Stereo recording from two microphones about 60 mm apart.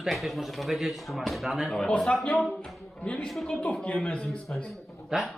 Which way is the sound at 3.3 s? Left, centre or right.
Centre.